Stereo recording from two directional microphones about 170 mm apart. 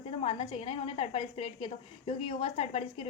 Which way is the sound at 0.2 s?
35° left (ahead or behind).